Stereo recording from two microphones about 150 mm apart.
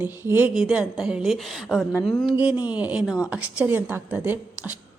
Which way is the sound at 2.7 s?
10° right (ahead or behind).